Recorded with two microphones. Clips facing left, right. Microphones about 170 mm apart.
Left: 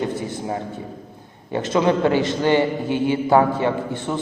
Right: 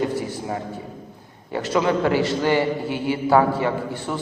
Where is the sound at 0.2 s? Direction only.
20° left (ahead or behind).